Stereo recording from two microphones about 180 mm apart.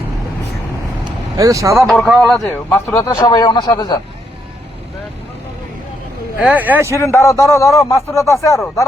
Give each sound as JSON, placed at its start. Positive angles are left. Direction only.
{"t": 1.4, "sound": "speech", "side_deg": -20}
{"t": 1.8, "sound": "speech", "side_deg": 0}
{"t": 2.5, "sound": "speech", "side_deg": 15}
{"t": 6.4, "sound": "speech", "side_deg": -10}
{"t": 6.9, "sound": "speech", "side_deg": 15}